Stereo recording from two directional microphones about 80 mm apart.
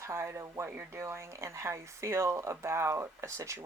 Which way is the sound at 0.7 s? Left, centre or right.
Right.